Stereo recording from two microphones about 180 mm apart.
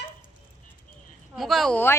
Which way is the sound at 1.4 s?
Centre (ahead or behind).